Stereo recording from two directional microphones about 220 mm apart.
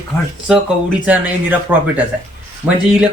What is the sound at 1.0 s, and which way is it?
Speech, 5° right (ahead or behind).